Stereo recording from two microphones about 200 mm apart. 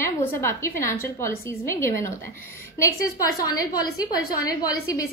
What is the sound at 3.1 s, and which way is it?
Speech, 20° left (ahead or behind).